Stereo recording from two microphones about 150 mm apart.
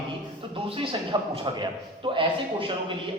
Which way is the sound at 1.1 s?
25° right (ahead or behind).